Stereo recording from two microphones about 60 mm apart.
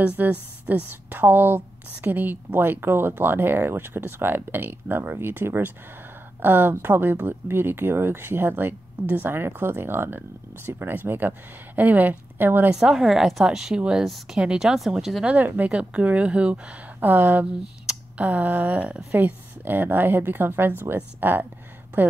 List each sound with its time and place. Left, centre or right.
0.2 s speech: right
12.7 s speech: centre
15.2 s speech: right
15.7 s speech: centre
17.0 s speech: right